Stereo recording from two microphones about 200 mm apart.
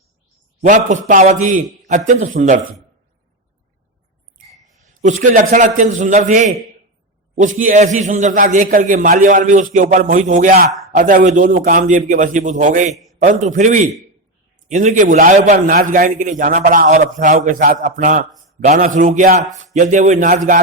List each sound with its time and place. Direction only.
0.6 s a man's voice: 40° right (ahead or behind)
2.4 s a man's voice: 50° right (ahead or behind)
4.8 s a man's voice: 35° right (ahead or behind)
12.9 s a man's voice: centre (ahead or behind)
13.1 s a man's voice: 40° right (ahead or behind)